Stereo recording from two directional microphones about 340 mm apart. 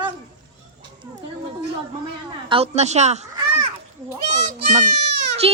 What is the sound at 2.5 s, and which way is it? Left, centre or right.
A child's voice, centre.